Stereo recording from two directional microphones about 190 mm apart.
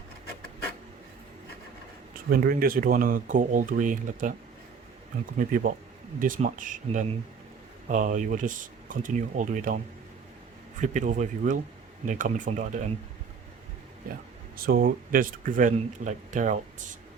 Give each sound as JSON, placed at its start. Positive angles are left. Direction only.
{"t": 2.3, "sound": "speech", "side_deg": -50}
{"t": 5.4, "sound": "speech", "side_deg": -45}
{"t": 10.8, "sound": "speech", "side_deg": -40}
{"t": 14.5, "sound": "speech", "side_deg": -50}